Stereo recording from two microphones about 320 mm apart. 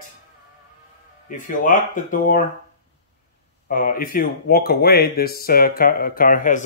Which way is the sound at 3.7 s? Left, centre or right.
Left.